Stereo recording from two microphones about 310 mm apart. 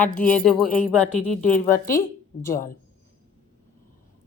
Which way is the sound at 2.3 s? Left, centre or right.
Left.